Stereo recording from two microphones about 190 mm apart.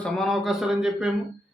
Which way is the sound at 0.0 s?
Centre (ahead or behind).